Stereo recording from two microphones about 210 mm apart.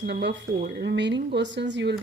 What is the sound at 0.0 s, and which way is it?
Speech, 55° right (ahead or behind).